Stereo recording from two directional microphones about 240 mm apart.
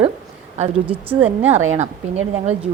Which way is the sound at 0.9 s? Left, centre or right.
Centre.